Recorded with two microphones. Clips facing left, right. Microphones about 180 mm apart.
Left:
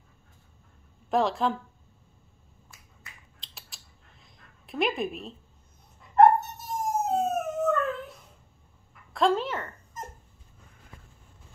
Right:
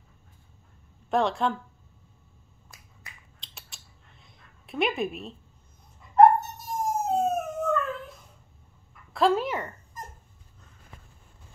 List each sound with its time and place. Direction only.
1.1 s a woman's voice: centre (ahead or behind)
3.3 s a sound: centre (ahead or behind)
6.1 s dog: centre (ahead or behind)
9.1 s a woman's voice: 5° right (ahead or behind)
9.9 s dog: 20° left (ahead or behind)